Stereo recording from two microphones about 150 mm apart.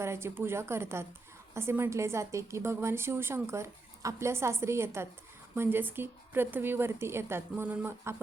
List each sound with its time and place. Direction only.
0.0 s a woman's voice: 15° right (ahead or behind)